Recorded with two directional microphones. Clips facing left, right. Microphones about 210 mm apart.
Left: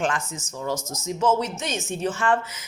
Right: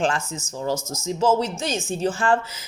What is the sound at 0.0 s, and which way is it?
Speech, 30° right (ahead or behind).